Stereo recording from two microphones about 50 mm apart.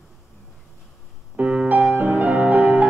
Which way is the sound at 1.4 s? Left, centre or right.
Right.